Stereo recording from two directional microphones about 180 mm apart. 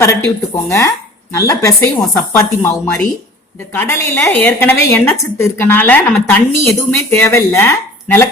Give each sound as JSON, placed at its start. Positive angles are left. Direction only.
{"t": 0.5, "sound": "a woman's voice", "side_deg": 15}